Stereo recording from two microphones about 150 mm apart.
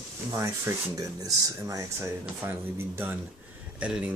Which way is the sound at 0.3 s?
20° right (ahead or behind).